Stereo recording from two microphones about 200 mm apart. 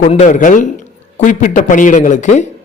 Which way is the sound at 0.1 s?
35° left (ahead or behind).